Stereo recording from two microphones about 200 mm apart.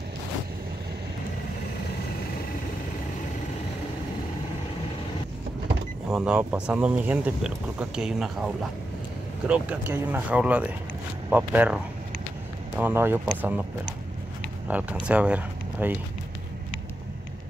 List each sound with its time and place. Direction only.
6.0 s speech: 5° right (ahead or behind)
9.5 s speech: 10° right (ahead or behind)